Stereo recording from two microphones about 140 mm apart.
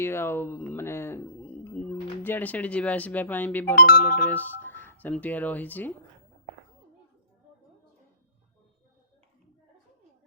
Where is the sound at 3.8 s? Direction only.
90° left.